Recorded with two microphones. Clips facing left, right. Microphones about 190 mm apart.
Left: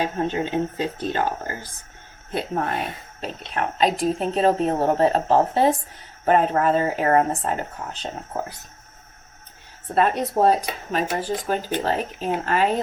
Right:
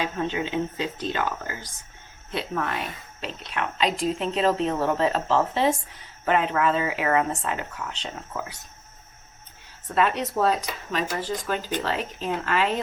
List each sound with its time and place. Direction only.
0.1 s a woman's voice: 35° left (ahead or behind)
9.9 s a woman's voice: 35° left (ahead or behind)
11.7 s a woman's voice: 40° left (ahead or behind)